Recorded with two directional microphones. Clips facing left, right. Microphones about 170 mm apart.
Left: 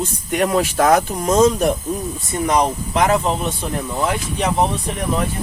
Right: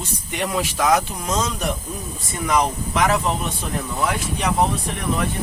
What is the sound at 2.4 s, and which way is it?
Speech, 35° left (ahead or behind).